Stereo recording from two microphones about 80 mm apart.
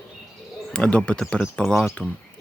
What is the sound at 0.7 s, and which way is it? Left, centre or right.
Speech, centre.